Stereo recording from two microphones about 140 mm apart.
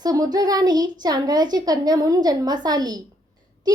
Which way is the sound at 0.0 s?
25° right (ahead or behind).